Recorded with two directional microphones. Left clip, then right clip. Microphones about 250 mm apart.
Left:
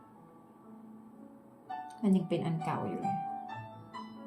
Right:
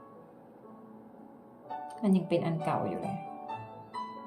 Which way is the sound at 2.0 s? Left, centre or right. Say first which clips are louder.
Right 3 dB; centre.